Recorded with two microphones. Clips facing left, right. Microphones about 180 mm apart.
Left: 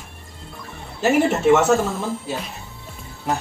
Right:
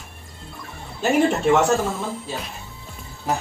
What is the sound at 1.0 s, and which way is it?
A woman's voice, 5° left (ahead or behind).